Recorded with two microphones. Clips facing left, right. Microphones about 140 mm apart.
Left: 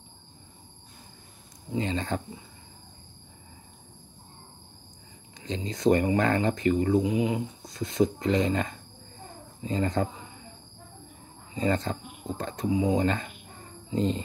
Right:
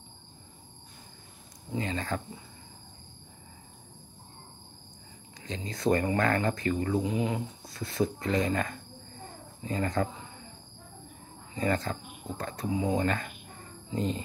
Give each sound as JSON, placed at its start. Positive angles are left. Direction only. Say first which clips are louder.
{"t": 1.7, "sound": "speech", "louder": "left 3 dB", "side_deg": 25}
{"t": 5.4, "sound": "speech", "louder": "left 5 dB", "side_deg": 20}
{"t": 11.5, "sound": "speech", "louder": "left 2 dB", "side_deg": 25}